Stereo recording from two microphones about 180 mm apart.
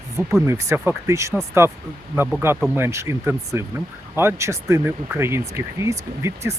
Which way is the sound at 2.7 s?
15° right (ahead or behind).